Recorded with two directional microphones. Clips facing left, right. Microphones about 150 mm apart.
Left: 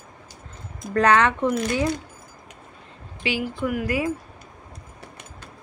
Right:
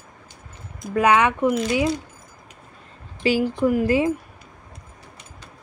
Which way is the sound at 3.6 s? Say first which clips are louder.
Right 5 dB; 30° right (ahead or behind).